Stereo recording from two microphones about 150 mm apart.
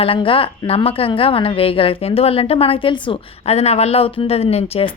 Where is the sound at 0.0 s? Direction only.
35° left (ahead or behind).